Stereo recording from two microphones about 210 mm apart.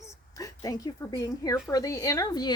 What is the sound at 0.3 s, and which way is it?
A woman's voice, 15° left (ahead or behind).